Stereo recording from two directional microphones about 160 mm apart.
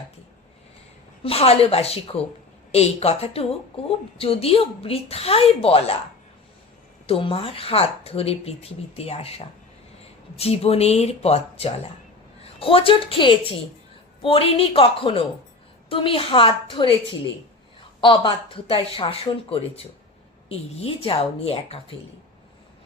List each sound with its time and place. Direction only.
1.2 s speech: 40° left (ahead or behind)
7.1 s speech: 35° left (ahead or behind)
18.0 s speech: 30° left (ahead or behind)